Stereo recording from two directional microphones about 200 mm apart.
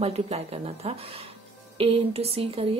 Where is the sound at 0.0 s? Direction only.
30° right (ahead or behind).